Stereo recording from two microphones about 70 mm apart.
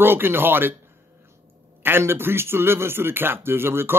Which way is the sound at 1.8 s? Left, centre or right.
Right.